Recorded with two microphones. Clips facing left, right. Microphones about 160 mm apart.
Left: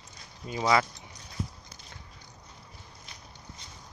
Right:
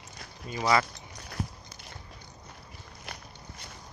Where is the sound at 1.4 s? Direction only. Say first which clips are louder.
Right 1 dB; 65° right (ahead or behind).